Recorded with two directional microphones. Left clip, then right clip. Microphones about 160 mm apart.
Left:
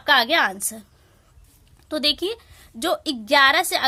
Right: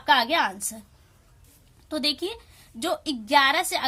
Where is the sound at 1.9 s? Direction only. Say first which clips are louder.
Left 5 dB; 50° left (ahead or behind).